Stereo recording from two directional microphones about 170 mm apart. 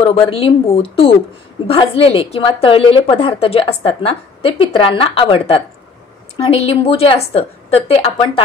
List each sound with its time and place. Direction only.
0.0 s a woman's voice: 30° left (ahead or behind)